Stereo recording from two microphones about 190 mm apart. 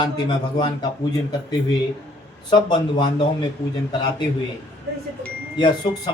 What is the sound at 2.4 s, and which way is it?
Speech, 25° left (ahead or behind).